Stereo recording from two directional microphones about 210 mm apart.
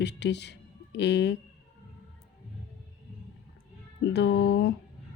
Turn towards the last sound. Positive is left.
turn(degrees=55)  # may be behind; listen again after turning